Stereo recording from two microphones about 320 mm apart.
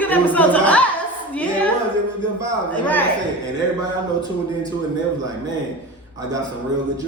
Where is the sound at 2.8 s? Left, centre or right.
Centre.